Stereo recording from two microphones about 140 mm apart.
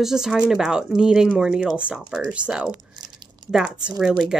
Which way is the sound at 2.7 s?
30° right (ahead or behind).